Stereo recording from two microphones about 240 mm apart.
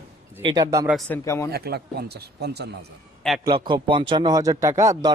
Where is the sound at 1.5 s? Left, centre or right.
Right.